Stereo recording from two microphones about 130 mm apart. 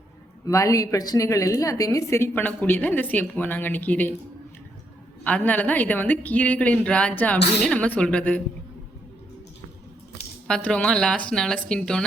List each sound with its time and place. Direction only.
0.4 s a woman's voice: 25° left (ahead or behind)
5.2 s a woman's voice: 10° left (ahead or behind)
10.4 s a woman's voice: 5° left (ahead or behind)